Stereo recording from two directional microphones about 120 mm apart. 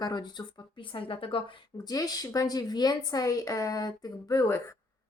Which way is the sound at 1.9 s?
30° left (ahead or behind).